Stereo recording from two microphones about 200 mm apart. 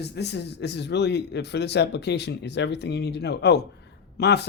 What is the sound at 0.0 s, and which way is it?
Speech, 60° left (ahead or behind).